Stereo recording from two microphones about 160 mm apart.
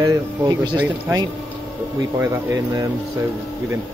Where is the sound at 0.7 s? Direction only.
10° right (ahead or behind).